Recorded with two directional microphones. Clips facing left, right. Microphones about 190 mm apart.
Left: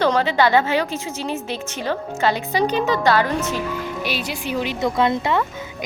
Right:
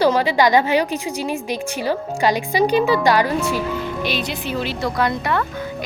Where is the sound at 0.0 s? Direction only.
10° right (ahead or behind).